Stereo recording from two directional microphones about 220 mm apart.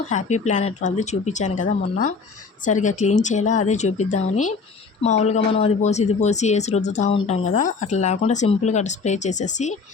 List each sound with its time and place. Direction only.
0.1 s speech: 30° left (ahead or behind)